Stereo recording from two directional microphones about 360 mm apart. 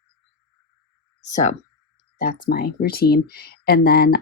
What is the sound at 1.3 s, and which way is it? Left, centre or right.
Speech, left.